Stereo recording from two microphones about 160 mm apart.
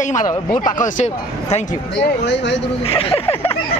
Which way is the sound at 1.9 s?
90° left.